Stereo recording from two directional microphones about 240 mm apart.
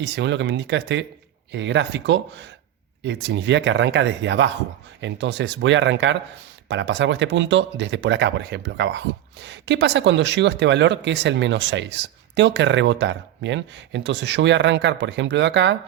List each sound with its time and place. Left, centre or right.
0.0 s speech: right